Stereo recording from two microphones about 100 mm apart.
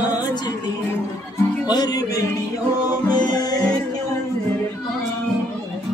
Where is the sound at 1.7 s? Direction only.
40° left (ahead or behind).